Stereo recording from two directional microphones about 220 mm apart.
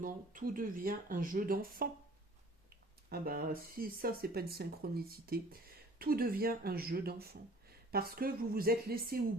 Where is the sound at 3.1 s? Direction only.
45° right (ahead or behind).